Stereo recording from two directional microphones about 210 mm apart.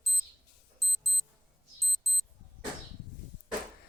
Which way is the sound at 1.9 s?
Centre (ahead or behind).